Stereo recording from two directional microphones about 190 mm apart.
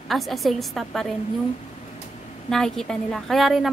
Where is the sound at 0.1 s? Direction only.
Centre (ahead or behind).